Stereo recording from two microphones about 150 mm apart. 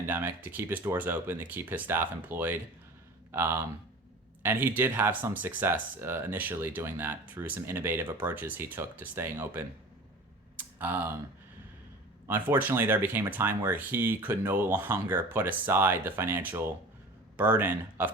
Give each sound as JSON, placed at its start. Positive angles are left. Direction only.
{"t": 0.0, "sound": "speech", "side_deg": -15}
{"t": 12.3, "sound": "speech", "side_deg": -10}